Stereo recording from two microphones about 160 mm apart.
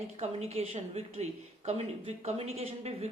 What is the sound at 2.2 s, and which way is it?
Speech, 40° right (ahead or behind).